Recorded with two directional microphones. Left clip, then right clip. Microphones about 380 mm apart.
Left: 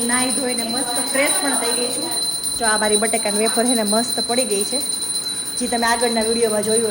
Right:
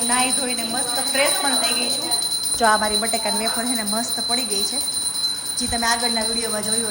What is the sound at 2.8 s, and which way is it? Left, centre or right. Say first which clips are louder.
Speech: left 3 dB; centre.